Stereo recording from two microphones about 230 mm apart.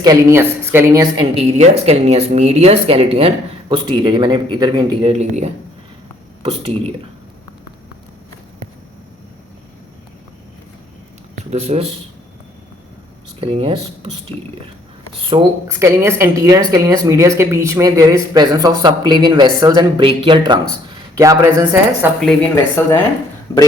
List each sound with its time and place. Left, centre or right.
0.0 s speech: centre
11.5 s speech: right
13.4 s speech: right
22.2 s a man's voice: centre